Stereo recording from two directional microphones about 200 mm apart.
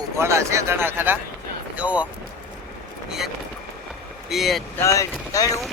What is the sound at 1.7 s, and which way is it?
Music, 5° right (ahead or behind).